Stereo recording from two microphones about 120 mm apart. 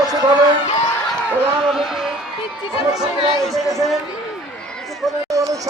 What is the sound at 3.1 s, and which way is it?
Speech, 45° left (ahead or behind).